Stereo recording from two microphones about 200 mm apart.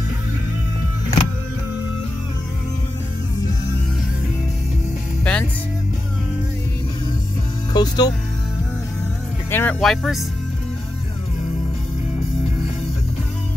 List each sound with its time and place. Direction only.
5.2 s music: 5° left (ahead or behind)
7.7 s music: 20° left (ahead or behind)
9.5 s speech: 10° left (ahead or behind)
9.8 s speech: centre (ahead or behind)